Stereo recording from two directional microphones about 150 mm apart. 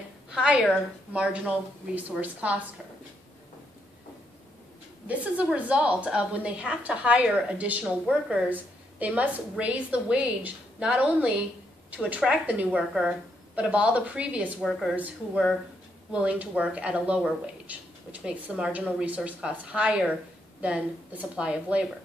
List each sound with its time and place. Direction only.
0.3 s speech: 5° right (ahead or behind)
5.0 s speech: 10° right (ahead or behind)